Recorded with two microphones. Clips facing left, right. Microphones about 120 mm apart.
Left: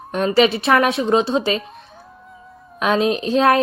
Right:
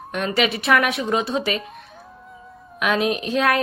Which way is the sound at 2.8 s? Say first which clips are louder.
Left 3 dB; 30° left (ahead or behind).